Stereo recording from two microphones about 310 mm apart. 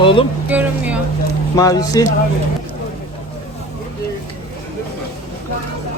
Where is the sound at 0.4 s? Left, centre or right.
Centre.